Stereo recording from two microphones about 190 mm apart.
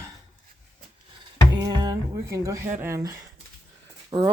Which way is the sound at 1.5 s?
20° right (ahead or behind).